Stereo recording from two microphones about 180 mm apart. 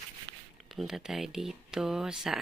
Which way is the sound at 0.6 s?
Centre (ahead or behind).